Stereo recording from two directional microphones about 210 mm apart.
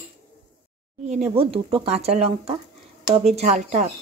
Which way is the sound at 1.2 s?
25° right (ahead or behind).